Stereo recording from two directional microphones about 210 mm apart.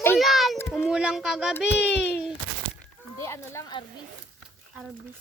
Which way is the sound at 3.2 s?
15° left (ahead or behind).